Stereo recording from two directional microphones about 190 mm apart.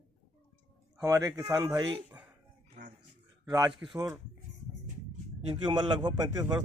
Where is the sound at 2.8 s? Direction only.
40° right (ahead or behind).